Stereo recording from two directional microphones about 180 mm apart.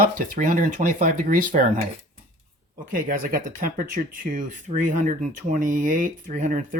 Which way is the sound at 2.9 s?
50° right (ahead or behind).